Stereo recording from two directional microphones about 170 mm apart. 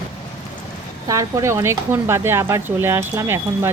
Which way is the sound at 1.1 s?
20° right (ahead or behind).